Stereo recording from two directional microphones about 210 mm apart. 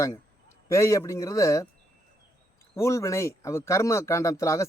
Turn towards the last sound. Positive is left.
turn(degrees=15)  # may be behind; listen again after turning